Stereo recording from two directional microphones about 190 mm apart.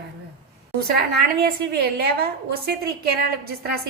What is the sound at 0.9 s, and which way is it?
A woman's voice, 55° right (ahead or behind).